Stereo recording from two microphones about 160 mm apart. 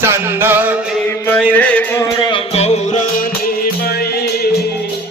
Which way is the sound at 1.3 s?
10° left (ahead or behind).